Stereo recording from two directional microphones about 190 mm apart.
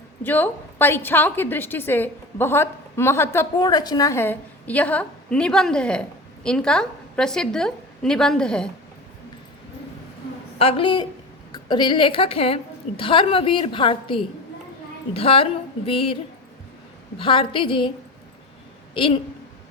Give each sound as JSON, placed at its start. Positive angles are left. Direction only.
{"t": 0.2, "sound": "a woman's voice", "side_deg": 10}
{"t": 10.6, "sound": "a woman's voice", "side_deg": 30}
{"t": 17.2, "sound": "a woman's voice", "side_deg": 25}
{"t": 18.9, "sound": "a woman's voice", "side_deg": 25}